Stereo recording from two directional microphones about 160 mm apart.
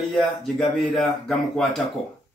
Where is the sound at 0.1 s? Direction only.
5° left (ahead or behind).